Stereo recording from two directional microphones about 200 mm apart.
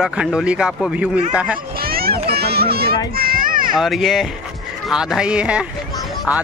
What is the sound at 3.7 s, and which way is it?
Speech, centre (ahead or behind).